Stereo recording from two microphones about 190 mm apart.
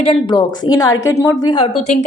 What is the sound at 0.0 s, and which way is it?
A woman's voice, 25° left (ahead or behind).